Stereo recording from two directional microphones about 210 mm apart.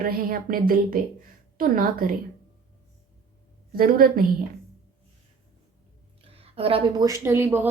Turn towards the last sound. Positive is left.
turn(degrees=-10)  # may be behind; listen again after turning